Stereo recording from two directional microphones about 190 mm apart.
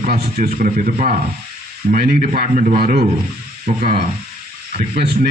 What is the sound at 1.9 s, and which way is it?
Speech, 50° right (ahead or behind).